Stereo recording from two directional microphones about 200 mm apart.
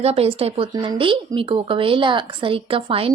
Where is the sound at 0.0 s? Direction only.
30° right (ahead or behind).